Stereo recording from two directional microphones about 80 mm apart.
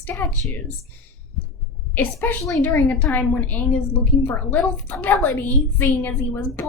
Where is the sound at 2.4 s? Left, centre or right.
Left.